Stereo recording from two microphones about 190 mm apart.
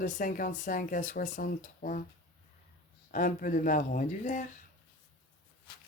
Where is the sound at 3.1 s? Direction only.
45° left (ahead or behind).